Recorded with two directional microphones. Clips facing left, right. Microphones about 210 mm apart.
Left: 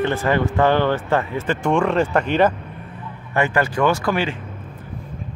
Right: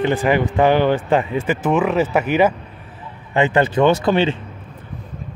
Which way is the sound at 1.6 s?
5° right (ahead or behind).